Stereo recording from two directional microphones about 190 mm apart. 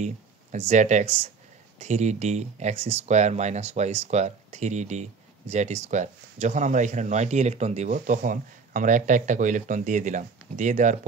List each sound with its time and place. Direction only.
0.0 s speech: 35° right (ahead or behind)